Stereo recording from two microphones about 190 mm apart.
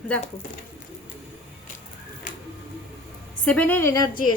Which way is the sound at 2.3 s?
45° left (ahead or behind).